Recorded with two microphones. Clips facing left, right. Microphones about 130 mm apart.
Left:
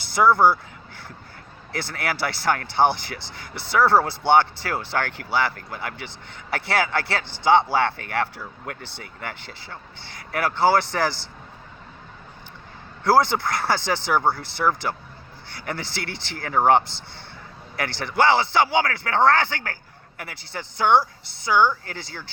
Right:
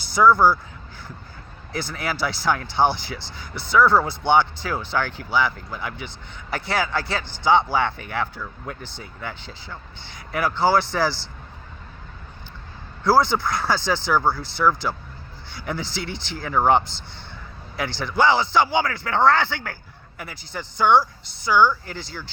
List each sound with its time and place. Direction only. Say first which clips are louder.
0.3 s speech: right 1 dB; 25° left (ahead or behind)
1.8 s speech: even; 65° left (ahead or behind)
13.1 s speech: even; 60° left (ahead or behind)
20.2 s speech: right 1 dB; 65° left (ahead or behind)